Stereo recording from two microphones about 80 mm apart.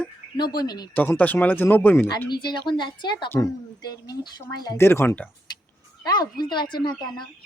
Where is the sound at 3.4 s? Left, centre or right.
Left.